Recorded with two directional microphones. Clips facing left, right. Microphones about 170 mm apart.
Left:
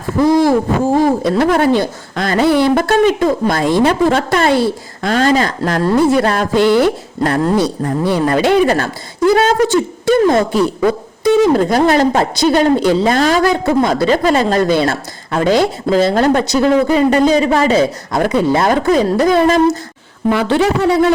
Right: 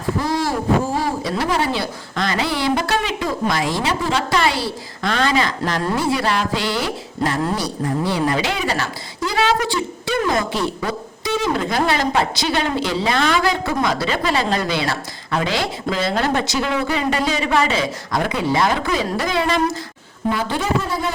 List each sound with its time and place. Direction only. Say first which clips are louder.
0.3 s a woman's voice: left 9 dB; 50° left (ahead or behind)
11.5 s a woman's voice: left 8 dB; 45° left (ahead or behind)
20.3 s a man's voice: left 8 dB; 70° left (ahead or behind)